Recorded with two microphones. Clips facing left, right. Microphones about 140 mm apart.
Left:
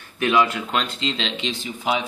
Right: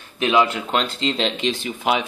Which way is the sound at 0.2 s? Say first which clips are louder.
Right 1 dB; 20° right (ahead or behind).